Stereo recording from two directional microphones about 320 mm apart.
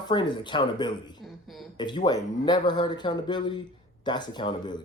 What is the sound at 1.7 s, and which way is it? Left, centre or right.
A man's voice, centre.